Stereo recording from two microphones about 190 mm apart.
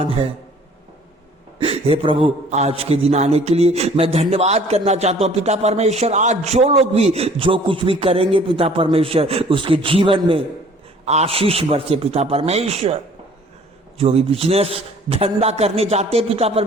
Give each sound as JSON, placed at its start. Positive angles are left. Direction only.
{"t": 1.5, "sound": "a man's voice", "side_deg": -30}
{"t": 14.0, "sound": "a man's voice", "side_deg": -30}